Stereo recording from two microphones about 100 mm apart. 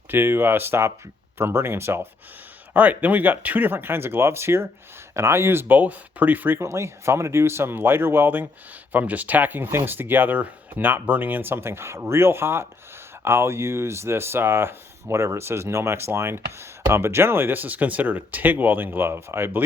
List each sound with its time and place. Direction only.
0.1 s speech: 20° right (ahead or behind)